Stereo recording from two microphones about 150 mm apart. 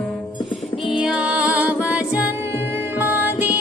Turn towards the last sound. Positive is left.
turn(degrees=-15)  # may be behind; listen again after turning